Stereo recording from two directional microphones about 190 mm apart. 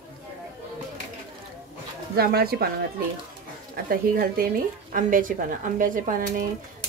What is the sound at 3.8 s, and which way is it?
Speech, 50° right (ahead or behind).